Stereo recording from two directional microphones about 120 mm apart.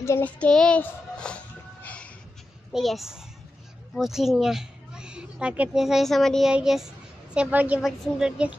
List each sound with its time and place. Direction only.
0.0 s child singing: 20° left (ahead or behind)
0.4 s a sound: 5° left (ahead or behind)
2.7 s a woman's voice: centre (ahead or behind)